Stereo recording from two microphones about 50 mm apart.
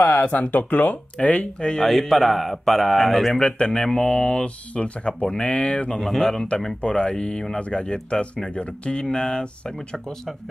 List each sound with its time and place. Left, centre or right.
0.2 s speech: left
1.8 s speech: centre
3.3 s speech: left
5.9 s speech: centre
6.8 s speech: left